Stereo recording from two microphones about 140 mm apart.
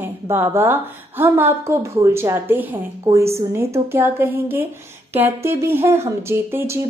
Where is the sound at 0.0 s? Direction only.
15° right (ahead or behind).